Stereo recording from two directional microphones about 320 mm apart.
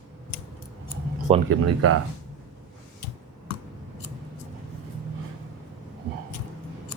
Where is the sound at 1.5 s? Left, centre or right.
Right.